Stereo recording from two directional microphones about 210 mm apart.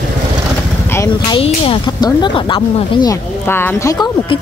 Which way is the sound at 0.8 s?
15° left (ahead or behind).